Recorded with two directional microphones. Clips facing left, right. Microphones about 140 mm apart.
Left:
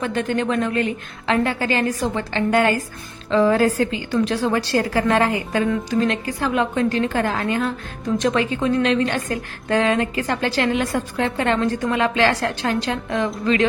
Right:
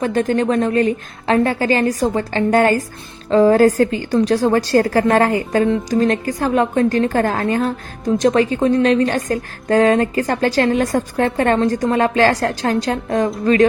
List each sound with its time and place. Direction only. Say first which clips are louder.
0.0 s a woman's voice: right 5 dB; 35° right (ahead or behind)